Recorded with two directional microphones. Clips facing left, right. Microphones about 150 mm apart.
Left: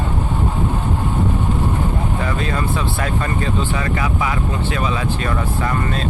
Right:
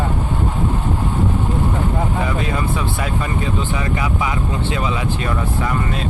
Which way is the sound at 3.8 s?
20° right (ahead or behind).